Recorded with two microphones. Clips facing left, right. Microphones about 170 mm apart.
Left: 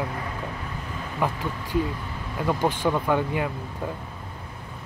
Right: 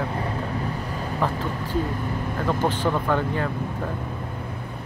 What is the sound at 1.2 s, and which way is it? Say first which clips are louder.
Speech: even; 15° left (ahead or behind).